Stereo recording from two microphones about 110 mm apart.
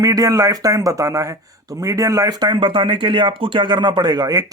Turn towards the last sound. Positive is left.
turn(degrees=-35)  # may be behind; listen again after turning